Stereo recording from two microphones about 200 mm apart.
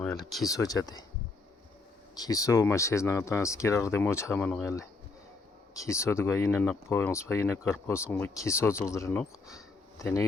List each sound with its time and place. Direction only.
0.0 s speech: centre (ahead or behind)
0.4 s speech: 20° left (ahead or behind)
2.1 s speech: 20° left (ahead or behind)